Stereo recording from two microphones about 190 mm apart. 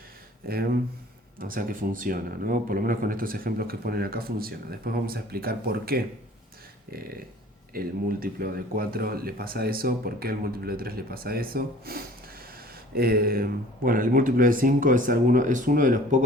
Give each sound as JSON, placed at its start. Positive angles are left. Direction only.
{"t": 0.4, "sound": "speech", "side_deg": -55}
{"t": 7.7, "sound": "speech", "side_deg": -50}